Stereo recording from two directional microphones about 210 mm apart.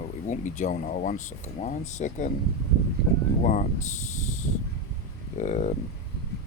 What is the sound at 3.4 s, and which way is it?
Speech, 35° left (ahead or behind).